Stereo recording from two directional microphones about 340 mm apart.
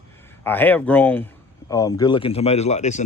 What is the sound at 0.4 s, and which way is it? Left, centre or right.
Speech, centre.